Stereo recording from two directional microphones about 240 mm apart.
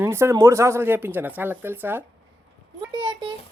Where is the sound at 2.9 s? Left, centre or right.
Centre.